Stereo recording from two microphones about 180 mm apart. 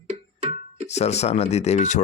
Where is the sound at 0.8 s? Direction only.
40° left (ahead or behind).